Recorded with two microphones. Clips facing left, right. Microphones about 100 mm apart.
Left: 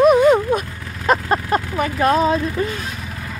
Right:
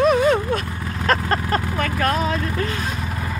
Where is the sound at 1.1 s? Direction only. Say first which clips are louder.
Left 3 dB; 15° left (ahead or behind).